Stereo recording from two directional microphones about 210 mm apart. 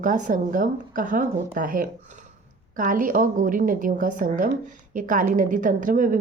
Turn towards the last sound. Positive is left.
turn(degrees=-40)  # may be behind; listen again after turning